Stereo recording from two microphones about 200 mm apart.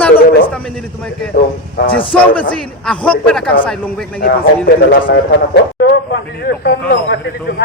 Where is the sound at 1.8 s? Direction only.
25° left (ahead or behind).